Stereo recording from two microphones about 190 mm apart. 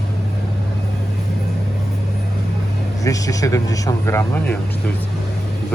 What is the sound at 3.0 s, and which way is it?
Speech, 15° left (ahead or behind).